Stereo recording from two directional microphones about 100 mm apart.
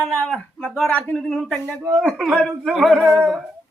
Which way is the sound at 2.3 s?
Centre (ahead or behind).